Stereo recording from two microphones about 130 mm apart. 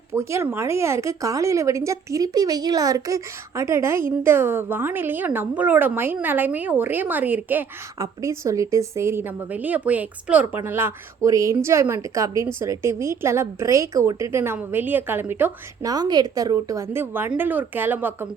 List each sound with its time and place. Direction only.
0.1 s a woman's voice: 20° right (ahead or behind)
7.9 s a woman's voice: 25° right (ahead or behind)
15.8 s a woman's voice: 30° right (ahead or behind)